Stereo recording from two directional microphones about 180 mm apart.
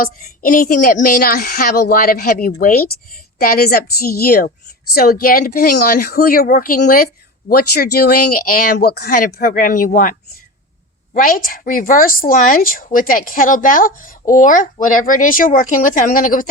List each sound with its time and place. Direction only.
0.0 s speech: 50° left (ahead or behind)